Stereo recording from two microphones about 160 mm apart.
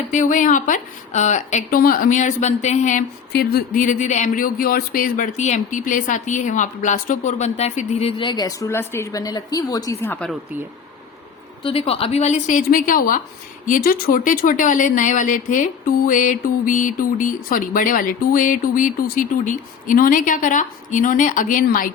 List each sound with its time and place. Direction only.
0.1 s speech: 50° left (ahead or behind)
1.8 s speech: 60° left (ahead or behind)
3.3 s speech: 70° left (ahead or behind); by 10.2 s 10° left (ahead or behind)
11.6 s speech: 35° left (ahead or behind); by 21.8 s 60° left (ahead or behind)